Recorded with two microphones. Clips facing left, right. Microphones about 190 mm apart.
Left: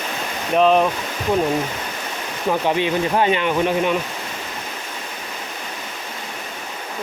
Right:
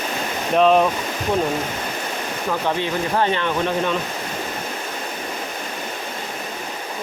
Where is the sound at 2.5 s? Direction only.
20° left (ahead or behind).